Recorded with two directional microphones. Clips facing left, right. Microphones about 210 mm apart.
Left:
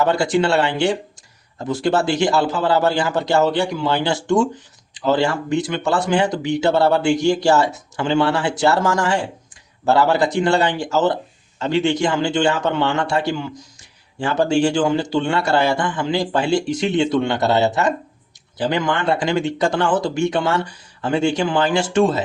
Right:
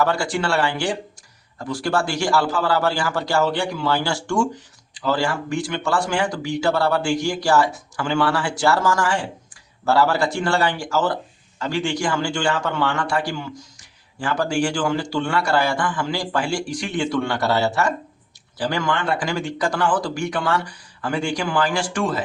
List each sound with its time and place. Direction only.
0.0 s speech: 20° left (ahead or behind)